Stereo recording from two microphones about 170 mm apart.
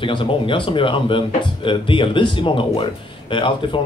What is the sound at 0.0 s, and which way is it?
Speech, 30° left (ahead or behind).